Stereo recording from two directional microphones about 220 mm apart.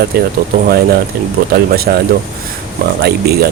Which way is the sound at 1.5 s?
45° right (ahead or behind).